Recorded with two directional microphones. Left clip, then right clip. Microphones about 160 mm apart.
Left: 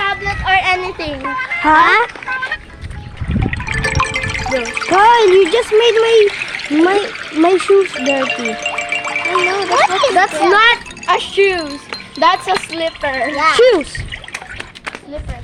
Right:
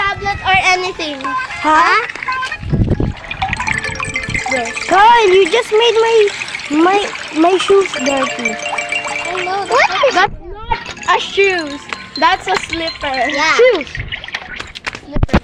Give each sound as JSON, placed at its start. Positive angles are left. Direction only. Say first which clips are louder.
{"t": 0.0, "sound": "a sound", "louder": "right 1 dB", "side_deg": -55}
{"t": 0.8, "sound": "speech", "louder": "right 2 dB", "side_deg": -25}
{"t": 1.6, "sound": "speech", "louder": "left 1 dB", "side_deg": 10}
{"t": 3.4, "sound": "music", "louder": "right 7 dB", "side_deg": -45}
{"t": 3.8, "sound": "music", "louder": "left 3 dB", "side_deg": 35}
{"t": 4.4, "sound": "speech", "louder": "even", "side_deg": -10}
{"t": 4.9, "sound": "speech", "louder": "right 1 dB", "side_deg": 5}
{"t": 6.0, "sound": "speech", "louder": "even", "side_deg": 15}
{"t": 6.2, "sound": "speech", "louder": "left 1 dB", "side_deg": -10}
{"t": 7.0, "sound": "speech", "louder": "right 1 dB", "side_deg": -20}
{"t": 8.4, "sound": "music", "louder": "right 1 dB", "side_deg": -10}
{"t": 9.4, "sound": "music", "louder": "right 1 dB", "side_deg": 20}
{"t": 10.2, "sound": "speech", "louder": "left 5 dB", "side_deg": 0}
{"t": 13.3, "sound": "speech", "louder": "left 1 dB", "side_deg": -55}